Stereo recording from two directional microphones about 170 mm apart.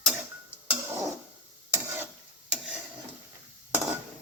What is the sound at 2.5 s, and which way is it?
Stir, 5° right (ahead or behind).